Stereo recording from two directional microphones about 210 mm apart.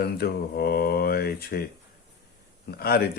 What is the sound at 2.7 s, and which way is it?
Speech, 50° left (ahead or behind).